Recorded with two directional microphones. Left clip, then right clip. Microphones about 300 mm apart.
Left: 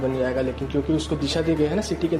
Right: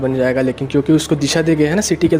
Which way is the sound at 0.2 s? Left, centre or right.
Right.